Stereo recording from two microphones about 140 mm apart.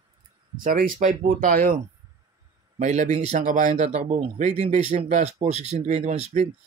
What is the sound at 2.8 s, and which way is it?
Speech, 55° right (ahead or behind).